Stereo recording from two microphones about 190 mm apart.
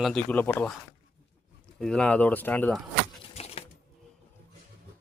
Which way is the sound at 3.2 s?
30° left (ahead or behind).